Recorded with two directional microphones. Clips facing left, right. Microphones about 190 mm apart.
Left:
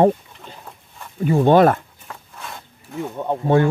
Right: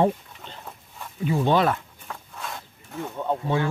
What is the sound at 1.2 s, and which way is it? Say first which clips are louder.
Speech: left 8 dB; 50° left (ahead or behind).